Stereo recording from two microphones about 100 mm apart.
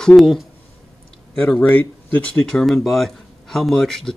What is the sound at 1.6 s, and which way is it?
Speech, 15° left (ahead or behind).